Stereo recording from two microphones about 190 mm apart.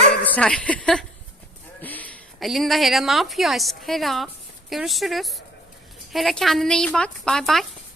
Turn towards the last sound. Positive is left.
turn(degrees=0)  # may be behind; listen again after turning